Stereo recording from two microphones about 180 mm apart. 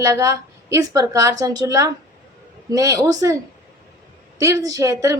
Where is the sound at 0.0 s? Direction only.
20° right (ahead or behind).